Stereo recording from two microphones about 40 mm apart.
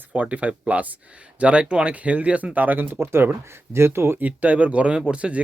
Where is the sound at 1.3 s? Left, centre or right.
Right.